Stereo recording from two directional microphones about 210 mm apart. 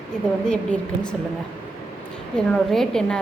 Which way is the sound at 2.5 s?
Centre (ahead or behind).